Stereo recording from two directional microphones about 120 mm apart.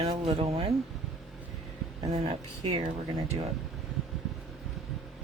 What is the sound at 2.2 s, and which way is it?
Speech, 45° right (ahead or behind).